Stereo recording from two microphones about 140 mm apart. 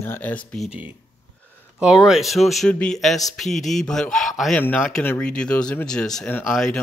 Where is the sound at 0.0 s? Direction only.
15° left (ahead or behind).